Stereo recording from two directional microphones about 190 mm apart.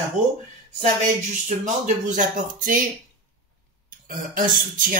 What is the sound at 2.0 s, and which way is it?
Speech, 40° right (ahead or behind).